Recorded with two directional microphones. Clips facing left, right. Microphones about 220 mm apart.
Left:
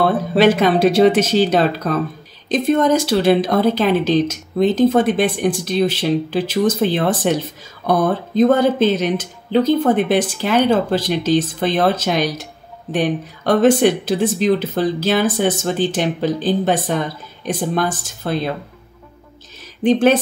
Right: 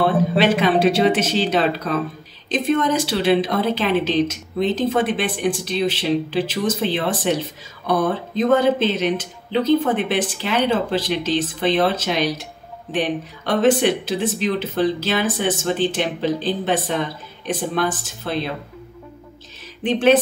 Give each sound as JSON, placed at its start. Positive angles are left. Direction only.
{"t": 0.4, "sound": "a woman's voice", "side_deg": 40}
{"t": 8.4, "sound": "a woman's voice", "side_deg": 45}